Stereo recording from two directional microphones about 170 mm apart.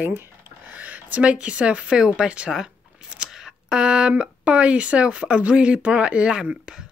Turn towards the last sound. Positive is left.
turn(degrees=-5)  # may be behind; listen again after turning